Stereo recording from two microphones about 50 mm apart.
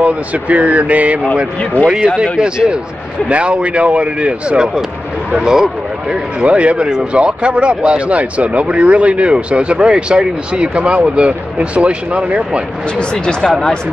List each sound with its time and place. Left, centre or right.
0.0 s speech: right
1.6 s speech: left
2.3 s speech: centre
6.4 s speech: right
13.1 s speech: centre